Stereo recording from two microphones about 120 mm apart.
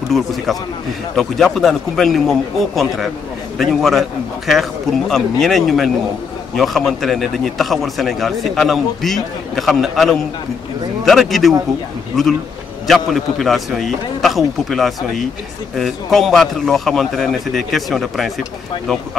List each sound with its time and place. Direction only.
0.1 s a man's voice: centre (ahead or behind)
12.8 s a man's voice: centre (ahead or behind)